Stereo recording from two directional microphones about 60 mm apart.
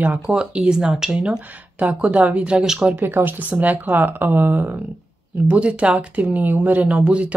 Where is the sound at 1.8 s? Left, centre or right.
Right.